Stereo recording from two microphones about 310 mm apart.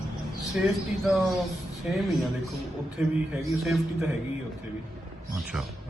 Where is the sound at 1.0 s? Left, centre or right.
Centre.